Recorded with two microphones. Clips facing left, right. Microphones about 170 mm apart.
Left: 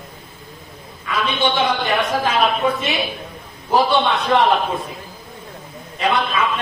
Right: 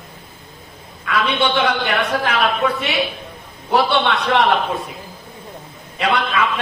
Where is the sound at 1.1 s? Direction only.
65° right (ahead or behind).